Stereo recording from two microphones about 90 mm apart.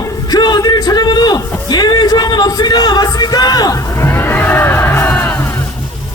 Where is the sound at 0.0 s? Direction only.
50° left (ahead or behind).